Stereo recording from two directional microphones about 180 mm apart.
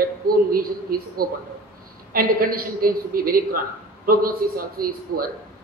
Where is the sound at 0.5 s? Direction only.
55° right (ahead or behind).